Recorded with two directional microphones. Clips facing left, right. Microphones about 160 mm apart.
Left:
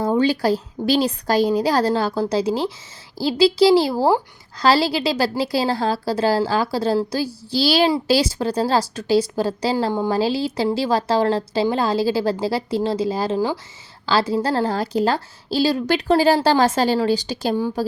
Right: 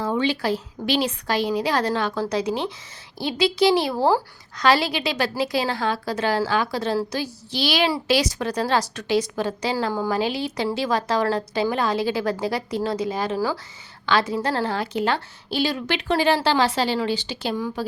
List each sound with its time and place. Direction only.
0.0 s a woman's voice: 40° left (ahead or behind)